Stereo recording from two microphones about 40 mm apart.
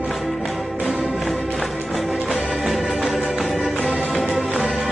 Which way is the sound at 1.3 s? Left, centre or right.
Centre.